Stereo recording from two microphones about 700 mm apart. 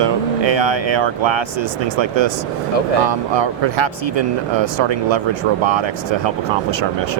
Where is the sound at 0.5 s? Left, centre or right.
Right.